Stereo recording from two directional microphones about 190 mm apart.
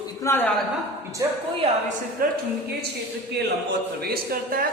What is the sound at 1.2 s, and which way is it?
Speech, 20° right (ahead or behind).